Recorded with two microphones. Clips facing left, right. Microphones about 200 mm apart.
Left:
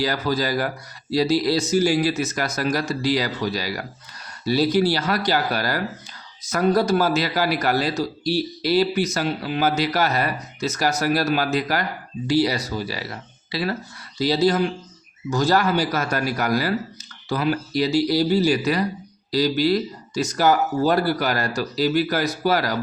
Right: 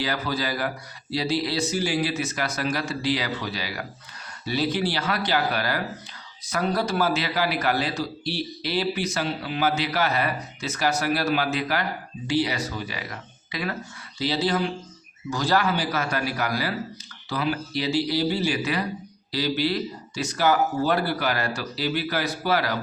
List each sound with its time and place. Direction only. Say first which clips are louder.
0.0 s a man's voice: left 5 dB; 40° left (ahead or behind)